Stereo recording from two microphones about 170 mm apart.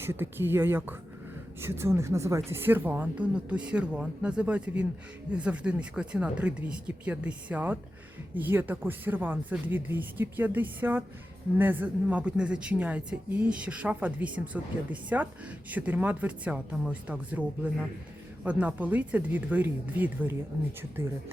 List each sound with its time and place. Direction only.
0.0 s a woman's voice: 15° right (ahead or behind)